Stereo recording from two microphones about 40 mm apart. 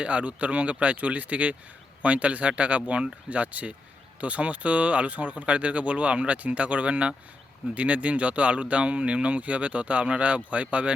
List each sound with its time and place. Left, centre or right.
0.0 s speech: right